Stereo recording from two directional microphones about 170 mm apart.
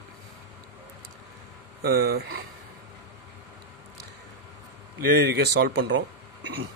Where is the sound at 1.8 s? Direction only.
65° right (ahead or behind).